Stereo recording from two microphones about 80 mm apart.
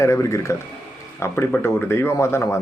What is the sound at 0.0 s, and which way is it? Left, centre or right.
Speech, left.